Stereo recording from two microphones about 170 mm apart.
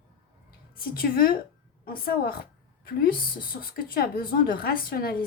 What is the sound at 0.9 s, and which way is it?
Speech, 60° left (ahead or behind).